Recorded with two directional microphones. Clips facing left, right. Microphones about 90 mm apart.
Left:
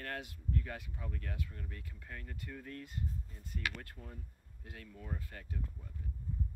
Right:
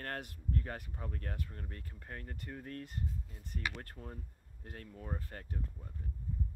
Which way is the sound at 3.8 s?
40° right (ahead or behind).